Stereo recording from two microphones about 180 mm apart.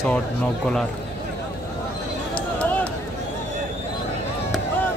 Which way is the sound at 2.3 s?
5° left (ahead or behind).